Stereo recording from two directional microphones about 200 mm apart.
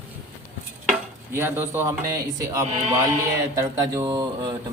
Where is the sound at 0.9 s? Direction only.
10° right (ahead or behind).